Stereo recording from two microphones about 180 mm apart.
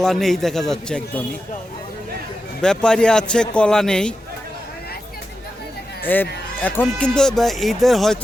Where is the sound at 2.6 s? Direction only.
5° left (ahead or behind).